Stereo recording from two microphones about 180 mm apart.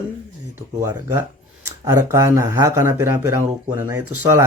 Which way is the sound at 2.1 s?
15° right (ahead or behind).